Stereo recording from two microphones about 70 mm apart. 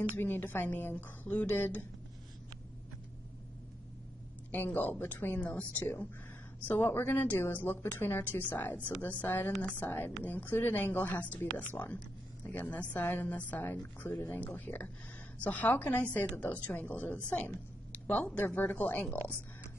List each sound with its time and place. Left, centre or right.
0.0 s a woman's voice: left
4.7 s a woman's voice: left